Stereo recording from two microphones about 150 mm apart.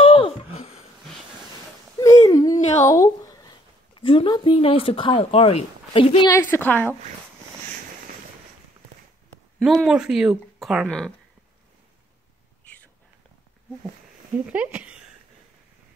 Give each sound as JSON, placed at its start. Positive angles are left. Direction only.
{"t": 0.0, "sound": "wheeze", "side_deg": 35}
{"t": 2.0, "sound": "a sound", "side_deg": 25}
{"t": 2.8, "sound": "speech", "side_deg": 20}
{"t": 3.9, "sound": "speech", "side_deg": 35}
{"t": 6.2, "sound": "a woman's voice", "side_deg": 20}
{"t": 9.6, "sound": "a woman's voice", "side_deg": 0}
{"t": 14.4, "sound": "speech", "side_deg": -10}